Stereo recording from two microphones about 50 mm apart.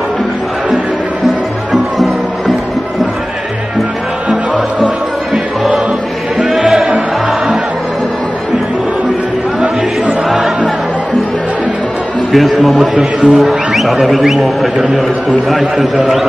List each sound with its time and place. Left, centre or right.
4.3 s music: right
6.5 s music: centre
12.3 s a man's voice: centre
12.9 s a man's voice: right
13.4 s a man's voice: centre